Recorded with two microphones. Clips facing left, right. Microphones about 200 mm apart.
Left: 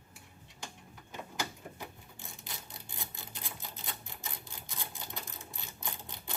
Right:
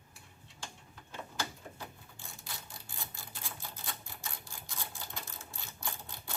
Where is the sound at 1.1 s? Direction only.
15° left (ahead or behind).